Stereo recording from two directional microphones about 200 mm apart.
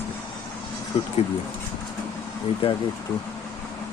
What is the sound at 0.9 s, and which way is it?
Speech, 30° left (ahead or behind).